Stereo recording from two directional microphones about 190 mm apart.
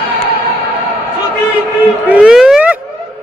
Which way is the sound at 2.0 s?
5° right (ahead or behind).